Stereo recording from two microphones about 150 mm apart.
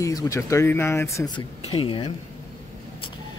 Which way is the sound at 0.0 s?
20° left (ahead or behind).